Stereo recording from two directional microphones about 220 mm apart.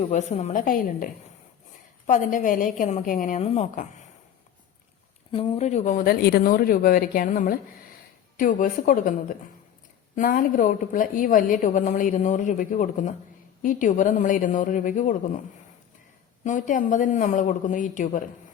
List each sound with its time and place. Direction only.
0.1 s a woman's voice: 30° left (ahead or behind)
5.3 s a woman's voice: 25° left (ahead or behind)
10.2 s a woman's voice: 40° left (ahead or behind)
16.4 s a woman's voice: 35° left (ahead or behind)